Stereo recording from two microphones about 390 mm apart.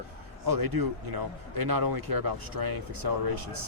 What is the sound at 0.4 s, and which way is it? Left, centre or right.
Speech, right.